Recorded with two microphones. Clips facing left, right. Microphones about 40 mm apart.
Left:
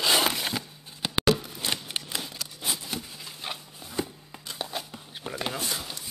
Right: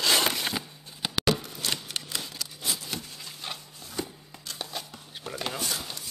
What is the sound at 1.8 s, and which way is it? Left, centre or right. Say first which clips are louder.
Scissors: left 1 dB; centre.